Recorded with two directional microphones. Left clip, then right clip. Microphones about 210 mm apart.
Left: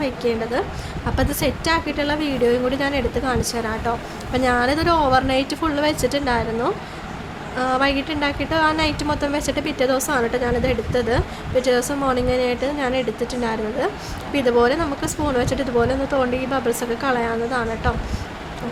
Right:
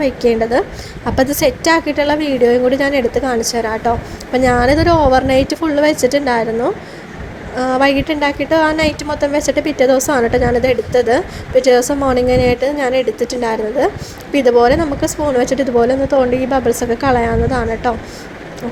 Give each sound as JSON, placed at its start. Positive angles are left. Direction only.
{"t": 0.0, "sound": "a woman's voice", "side_deg": -25}
{"t": 7.5, "sound": "a woman's voice", "side_deg": -20}